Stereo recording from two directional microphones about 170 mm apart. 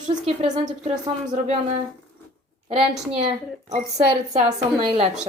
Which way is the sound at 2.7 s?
35° right (ahead or behind).